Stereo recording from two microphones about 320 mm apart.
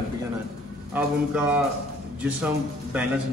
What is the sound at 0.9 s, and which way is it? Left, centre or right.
Speech, centre.